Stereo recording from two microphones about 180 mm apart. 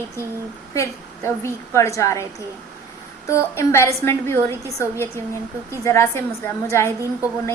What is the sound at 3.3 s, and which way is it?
A woman's voice, 15° left (ahead or behind).